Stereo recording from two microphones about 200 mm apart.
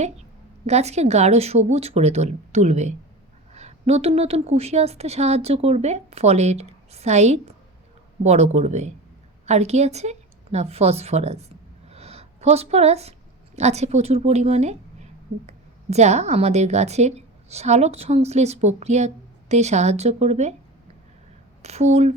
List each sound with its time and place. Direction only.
0.7 s a woman's voice: 35° right (ahead or behind)
21.6 s a woman's voice: 35° right (ahead or behind)